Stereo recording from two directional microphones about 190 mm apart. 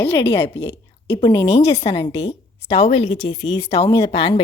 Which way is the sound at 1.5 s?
30° left (ahead or behind).